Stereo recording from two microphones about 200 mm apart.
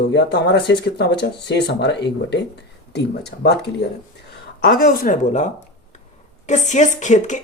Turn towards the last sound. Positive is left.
turn(degrees=35)  # may be behind; listen again after turning